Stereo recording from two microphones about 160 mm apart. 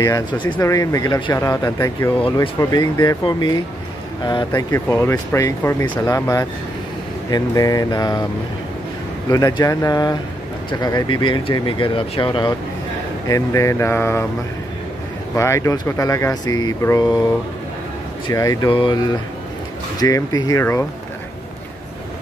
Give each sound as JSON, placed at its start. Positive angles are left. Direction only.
{"t": 0.0, "sound": "speech", "side_deg": 25}
{"t": 2.2, "sound": "speech", "side_deg": 35}
{"t": 9.3, "sound": "speech", "side_deg": 25}
{"t": 13.3, "sound": "speech", "side_deg": 20}
{"t": 15.3, "sound": "speech", "side_deg": 20}
{"t": 18.3, "sound": "speech", "side_deg": 20}